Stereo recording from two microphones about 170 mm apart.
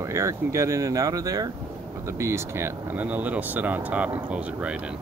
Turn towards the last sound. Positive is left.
turn(degrees=-5)  # may be behind; listen again after turning